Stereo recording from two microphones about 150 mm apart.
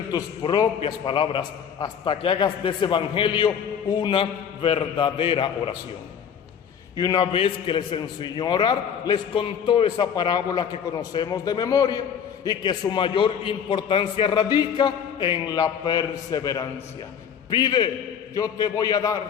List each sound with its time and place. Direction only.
0.1 s a man's voice: 25° left (ahead or behind)
6.9 s a man's voice: 25° left (ahead or behind)